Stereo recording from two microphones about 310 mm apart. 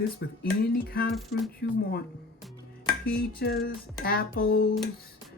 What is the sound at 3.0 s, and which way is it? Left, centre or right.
Speech, left.